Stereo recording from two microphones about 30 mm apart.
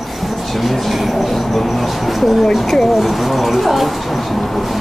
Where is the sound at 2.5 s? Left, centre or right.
Centre.